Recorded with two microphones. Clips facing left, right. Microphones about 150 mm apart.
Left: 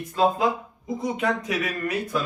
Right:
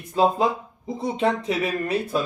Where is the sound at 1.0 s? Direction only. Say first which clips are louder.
Right 3 dB; 30° right (ahead or behind).